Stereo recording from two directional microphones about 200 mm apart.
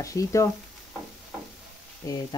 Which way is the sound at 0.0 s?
15° left (ahead or behind).